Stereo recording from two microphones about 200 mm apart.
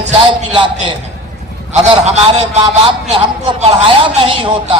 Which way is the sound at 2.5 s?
35° right (ahead or behind).